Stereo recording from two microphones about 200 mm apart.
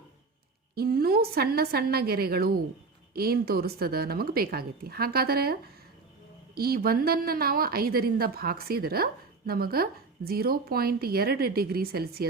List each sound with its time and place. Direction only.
0.8 s a woman's voice: 50° right (ahead or behind)